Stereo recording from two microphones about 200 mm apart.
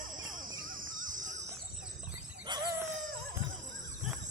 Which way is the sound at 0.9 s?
40° right (ahead or behind).